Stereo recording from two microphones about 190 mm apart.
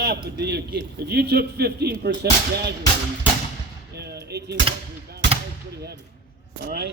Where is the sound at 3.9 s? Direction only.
60° right (ahead or behind).